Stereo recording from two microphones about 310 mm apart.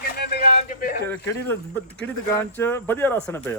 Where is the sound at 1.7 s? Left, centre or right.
Centre.